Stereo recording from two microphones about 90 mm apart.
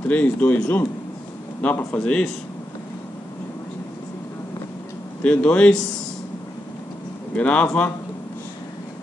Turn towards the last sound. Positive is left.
turn(degrees=15)  # may be behind; listen again after turning